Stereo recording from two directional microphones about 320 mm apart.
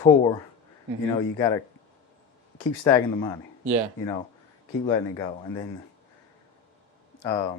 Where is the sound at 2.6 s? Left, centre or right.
Centre.